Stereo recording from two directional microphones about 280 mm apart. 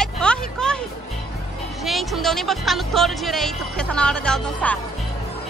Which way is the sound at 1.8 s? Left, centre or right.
Centre.